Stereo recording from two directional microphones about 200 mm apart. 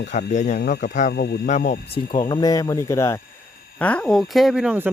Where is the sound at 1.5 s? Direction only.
40° left (ahead or behind).